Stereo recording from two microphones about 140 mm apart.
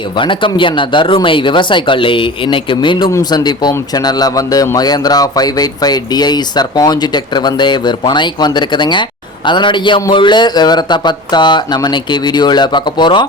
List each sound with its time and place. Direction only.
0.2 s a man's voice: 35° left (ahead or behind)